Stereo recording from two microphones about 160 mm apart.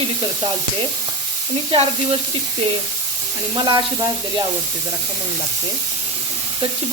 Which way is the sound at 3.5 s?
25° right (ahead or behind).